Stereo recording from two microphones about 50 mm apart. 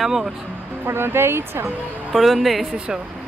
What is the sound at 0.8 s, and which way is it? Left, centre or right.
Speech, right.